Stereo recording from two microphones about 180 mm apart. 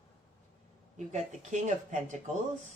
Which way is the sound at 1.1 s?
40° right (ahead or behind).